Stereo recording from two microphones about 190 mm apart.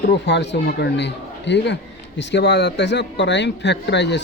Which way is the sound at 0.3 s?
65° left (ahead or behind).